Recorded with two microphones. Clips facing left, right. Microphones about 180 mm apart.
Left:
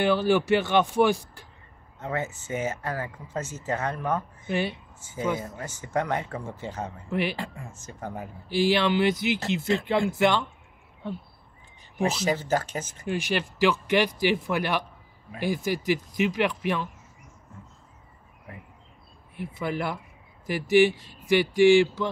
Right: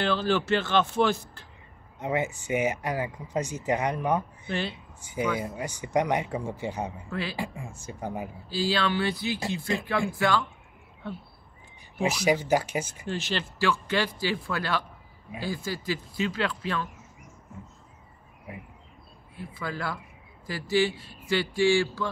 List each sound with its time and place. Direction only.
0.0 s speech: 15° left (ahead or behind)
2.0 s speech: 15° right (ahead or behind)
4.5 s speech: 15° left (ahead or behind)
5.0 s speech: 15° right (ahead or behind)
7.1 s speech: 20° left (ahead or behind)
7.3 s speech: 10° right (ahead or behind)
8.5 s speech: 20° left (ahead or behind)
12.0 s speech: 10° right (ahead or behind)
13.0 s speech: 15° left (ahead or behind)
19.3 s speech: 20° left (ahead or behind)